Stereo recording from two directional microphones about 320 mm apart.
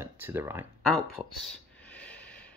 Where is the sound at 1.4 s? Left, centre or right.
Centre.